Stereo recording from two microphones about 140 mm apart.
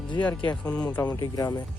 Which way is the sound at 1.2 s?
30° left (ahead or behind).